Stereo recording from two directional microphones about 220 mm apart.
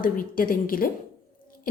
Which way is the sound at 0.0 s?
40° left (ahead or behind).